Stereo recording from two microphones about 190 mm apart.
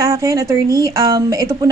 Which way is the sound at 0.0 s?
15° right (ahead or behind).